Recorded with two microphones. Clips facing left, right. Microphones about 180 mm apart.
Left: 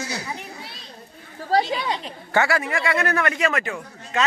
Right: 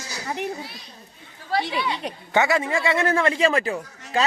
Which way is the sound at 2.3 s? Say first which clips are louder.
Right 1 dB; 20° right (ahead or behind).